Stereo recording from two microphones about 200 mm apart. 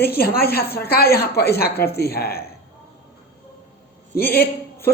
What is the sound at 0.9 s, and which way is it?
Speech, 50° left (ahead or behind).